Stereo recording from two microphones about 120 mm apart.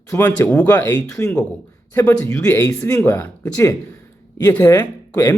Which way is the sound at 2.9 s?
15° left (ahead or behind).